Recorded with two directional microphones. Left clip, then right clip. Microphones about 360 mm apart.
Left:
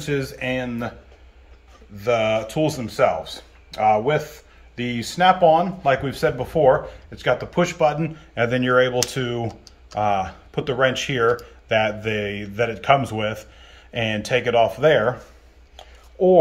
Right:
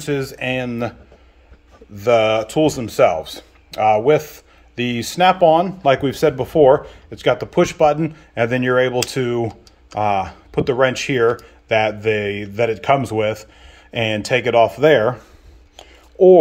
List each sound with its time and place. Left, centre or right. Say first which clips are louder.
0.0 s speech: right 3 dB; centre
2.0 s speech: right 5 dB; centre
15.7 s a sound: right 4 dB; right